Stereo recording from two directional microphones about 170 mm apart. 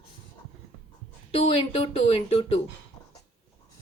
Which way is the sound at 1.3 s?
30° left (ahead or behind).